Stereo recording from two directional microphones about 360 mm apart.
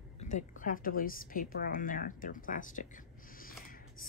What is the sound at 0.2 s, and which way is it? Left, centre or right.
A woman's voice, centre.